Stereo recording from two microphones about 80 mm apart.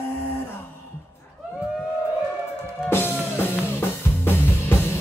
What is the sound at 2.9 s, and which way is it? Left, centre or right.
Music, left.